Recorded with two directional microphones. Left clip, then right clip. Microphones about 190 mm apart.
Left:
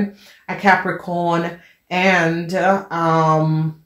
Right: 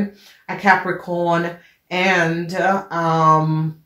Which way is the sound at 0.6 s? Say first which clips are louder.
Even; 35° left (ahead or behind).